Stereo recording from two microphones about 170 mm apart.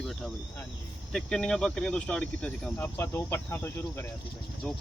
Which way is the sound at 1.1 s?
5° left (ahead or behind).